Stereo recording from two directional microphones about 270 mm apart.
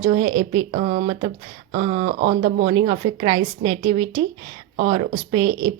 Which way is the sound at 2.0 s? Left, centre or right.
Right.